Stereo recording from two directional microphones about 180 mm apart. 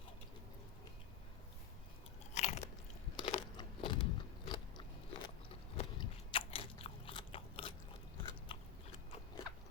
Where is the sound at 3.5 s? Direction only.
25° left (ahead or behind).